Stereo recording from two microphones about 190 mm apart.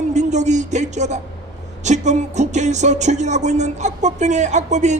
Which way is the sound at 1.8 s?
40° right (ahead or behind).